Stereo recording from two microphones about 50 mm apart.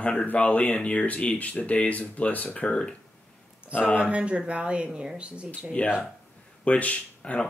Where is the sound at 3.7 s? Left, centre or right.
Left.